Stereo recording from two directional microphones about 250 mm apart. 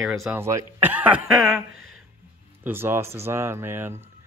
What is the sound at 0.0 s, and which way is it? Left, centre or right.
Speech, centre.